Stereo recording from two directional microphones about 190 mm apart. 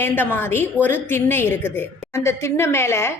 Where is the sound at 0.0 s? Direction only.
10° left (ahead or behind).